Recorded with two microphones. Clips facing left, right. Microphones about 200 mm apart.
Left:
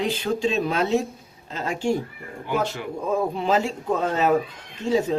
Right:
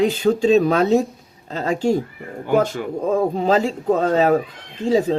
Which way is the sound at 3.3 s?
40° right (ahead or behind).